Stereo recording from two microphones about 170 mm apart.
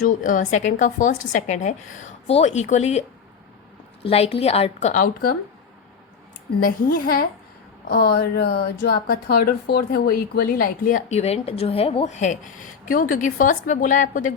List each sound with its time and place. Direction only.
0.2 s a woman's voice: 50° left (ahead or behind)
4.0 s a woman's voice: 35° left (ahead or behind)
6.6 s speech: 55° left (ahead or behind)
11.1 s a woman's voice: 40° left (ahead or behind)